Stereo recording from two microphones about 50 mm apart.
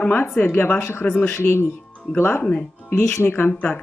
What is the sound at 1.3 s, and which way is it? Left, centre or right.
Speech, left.